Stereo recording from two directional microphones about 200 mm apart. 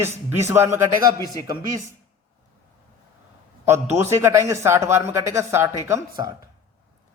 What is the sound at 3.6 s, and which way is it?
Speech, 15° right (ahead or behind).